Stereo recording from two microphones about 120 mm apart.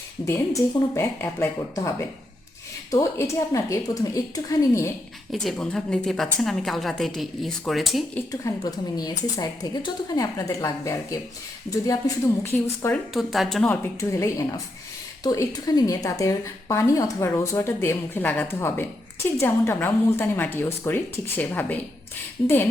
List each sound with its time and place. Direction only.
0.3 s a woman's voice: 20° left (ahead or behind)
5.3 s a woman's voice: centre (ahead or behind)
8.3 s a woman's voice: 30° left (ahead or behind)
13.1 s a woman's voice: centre (ahead or behind)
14.0 s a woman's voice: 25° left (ahead or behind)